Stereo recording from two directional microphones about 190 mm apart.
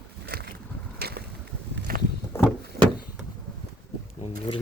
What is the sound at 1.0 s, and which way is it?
Skateboard, 55° right (ahead or behind).